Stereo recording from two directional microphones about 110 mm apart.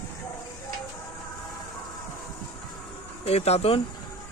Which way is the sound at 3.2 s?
70° left (ahead or behind).